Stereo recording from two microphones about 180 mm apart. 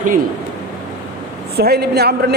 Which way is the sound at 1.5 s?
60° right (ahead or behind).